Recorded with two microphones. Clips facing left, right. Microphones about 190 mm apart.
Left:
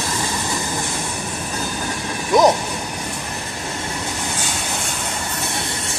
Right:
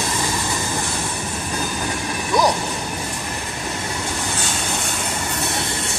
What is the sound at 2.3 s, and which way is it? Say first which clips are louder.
Vehicle: left 5 dB; 20° left (ahead or behind).